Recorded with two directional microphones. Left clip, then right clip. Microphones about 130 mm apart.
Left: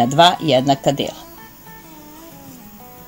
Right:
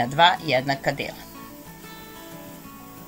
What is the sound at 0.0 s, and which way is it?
Speech, 35° left (ahead or behind).